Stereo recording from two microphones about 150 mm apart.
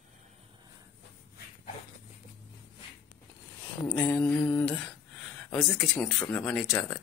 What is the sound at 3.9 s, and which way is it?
Speech, 15° left (ahead or behind).